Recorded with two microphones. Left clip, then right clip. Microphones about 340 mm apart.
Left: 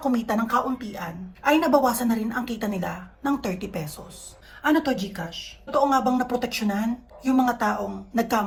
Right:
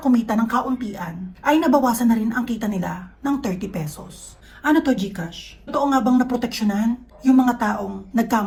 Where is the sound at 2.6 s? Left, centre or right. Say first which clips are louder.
Right 2 dB; left.